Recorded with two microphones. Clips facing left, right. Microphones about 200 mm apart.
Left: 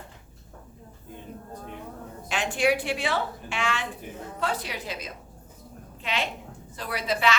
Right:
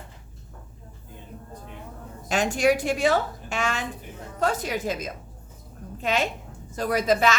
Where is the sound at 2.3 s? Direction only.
40° right (ahead or behind).